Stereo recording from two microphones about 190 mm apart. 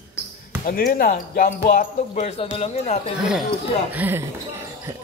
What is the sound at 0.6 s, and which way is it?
Speech, 50° left (ahead or behind).